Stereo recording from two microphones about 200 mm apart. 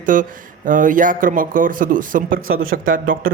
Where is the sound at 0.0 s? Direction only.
40° right (ahead or behind).